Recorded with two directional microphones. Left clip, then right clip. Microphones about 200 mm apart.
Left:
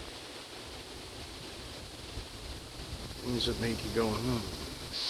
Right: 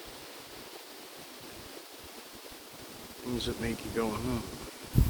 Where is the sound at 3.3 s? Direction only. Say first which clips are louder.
Left 2 dB; 20° right (ahead or behind).